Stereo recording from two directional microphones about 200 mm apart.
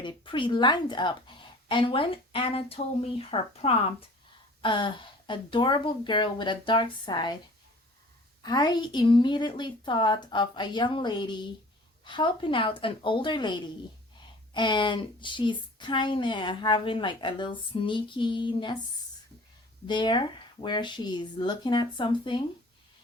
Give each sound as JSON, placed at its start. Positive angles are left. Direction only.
{"t": 0.0, "sound": "speech", "side_deg": 25}
{"t": 8.4, "sound": "speech", "side_deg": 20}
{"t": 19.9, "sound": "speech", "side_deg": 25}